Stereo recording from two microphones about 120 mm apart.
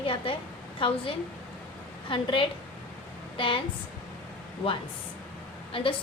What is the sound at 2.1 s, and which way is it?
A woman's voice, 45° left (ahead or behind).